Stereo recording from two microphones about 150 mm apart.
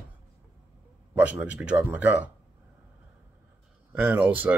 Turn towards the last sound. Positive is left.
turn(degrees=-10)  # may be behind; listen again after turning